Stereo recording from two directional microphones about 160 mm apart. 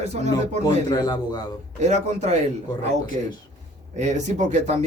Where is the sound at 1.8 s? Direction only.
45° right (ahead or behind).